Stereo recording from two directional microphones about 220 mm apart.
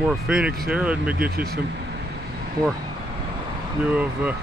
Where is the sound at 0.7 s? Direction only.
5° right (ahead or behind).